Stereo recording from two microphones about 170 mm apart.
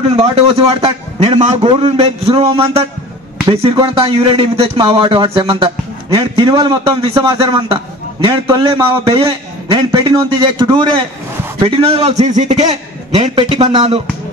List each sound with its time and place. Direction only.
0.1 s a man's voice: 35° right (ahead or behind)